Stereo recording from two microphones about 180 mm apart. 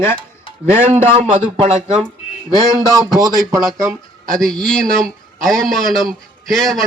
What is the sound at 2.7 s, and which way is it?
A man's voice, 20° right (ahead or behind).